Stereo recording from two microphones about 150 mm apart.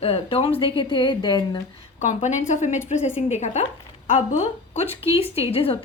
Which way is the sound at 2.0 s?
55° left (ahead or behind).